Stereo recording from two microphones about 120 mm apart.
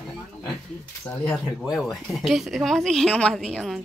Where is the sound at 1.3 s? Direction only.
Centre (ahead or behind).